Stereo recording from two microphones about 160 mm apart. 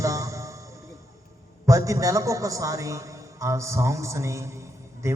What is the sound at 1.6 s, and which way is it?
A man's voice, 20° right (ahead or behind).